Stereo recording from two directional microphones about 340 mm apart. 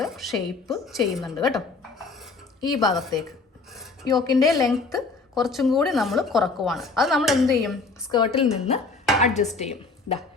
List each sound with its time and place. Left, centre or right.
0.0 s a woman's voice: centre
2.9 s a woman's voice: centre
8.1 s a woman's voice: centre
9.2 s dishes: centre
9.6 s speech: centre